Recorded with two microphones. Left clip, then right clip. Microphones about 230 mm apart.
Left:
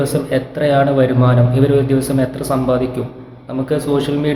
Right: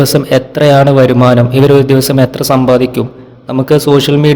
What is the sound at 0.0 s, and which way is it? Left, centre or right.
A man's voice, right.